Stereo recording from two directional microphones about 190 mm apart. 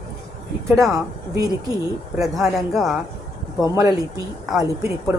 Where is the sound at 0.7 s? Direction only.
15° right (ahead or behind).